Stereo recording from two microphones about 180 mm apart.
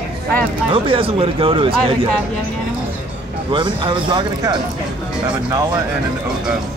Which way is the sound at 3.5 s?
25° right (ahead or behind).